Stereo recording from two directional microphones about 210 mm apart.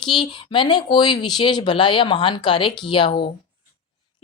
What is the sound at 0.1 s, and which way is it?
Speech, 25° left (ahead or behind).